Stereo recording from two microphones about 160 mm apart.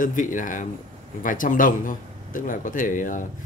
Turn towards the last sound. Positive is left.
turn(degrees=55)  # may be behind; listen again after turning